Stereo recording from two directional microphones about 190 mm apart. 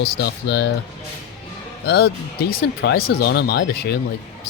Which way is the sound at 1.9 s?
60° left (ahead or behind).